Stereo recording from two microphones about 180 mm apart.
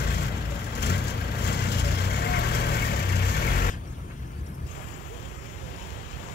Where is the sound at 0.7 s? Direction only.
65° left (ahead or behind).